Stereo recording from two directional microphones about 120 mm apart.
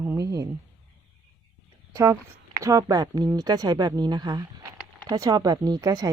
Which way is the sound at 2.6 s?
25° right (ahead or behind).